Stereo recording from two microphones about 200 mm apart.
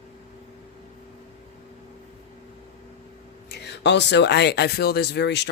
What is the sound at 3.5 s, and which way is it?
Speech, 55° left (ahead or behind).